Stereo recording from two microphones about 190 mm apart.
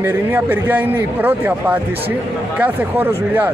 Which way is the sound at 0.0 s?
10° right (ahead or behind).